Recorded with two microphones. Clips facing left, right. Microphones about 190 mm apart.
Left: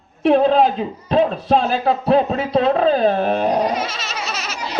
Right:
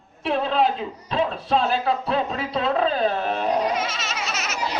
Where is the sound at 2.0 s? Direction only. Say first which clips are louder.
Left 8 dB; 40° left (ahead or behind).